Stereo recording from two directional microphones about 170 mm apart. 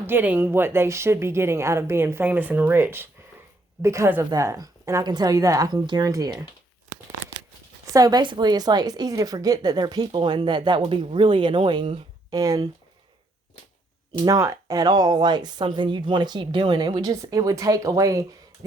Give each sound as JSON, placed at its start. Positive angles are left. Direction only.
{"t": 0.1, "sound": "a woman's voice", "side_deg": -10}
{"t": 7.9, "sound": "a woman's voice", "side_deg": -25}
{"t": 14.3, "sound": "a woman's voice", "side_deg": -20}